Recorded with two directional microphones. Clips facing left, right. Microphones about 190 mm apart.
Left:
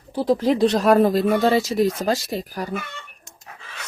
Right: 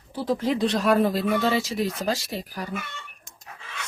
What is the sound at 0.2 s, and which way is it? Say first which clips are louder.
Speech: left 6 dB; 40° left (ahead or behind).